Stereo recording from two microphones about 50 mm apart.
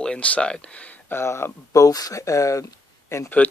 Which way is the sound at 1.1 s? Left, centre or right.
Left.